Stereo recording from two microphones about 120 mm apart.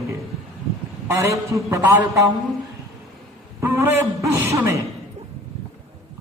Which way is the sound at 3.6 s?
20° right (ahead or behind).